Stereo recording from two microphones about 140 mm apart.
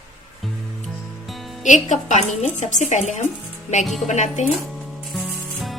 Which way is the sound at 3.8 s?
Centre (ahead or behind).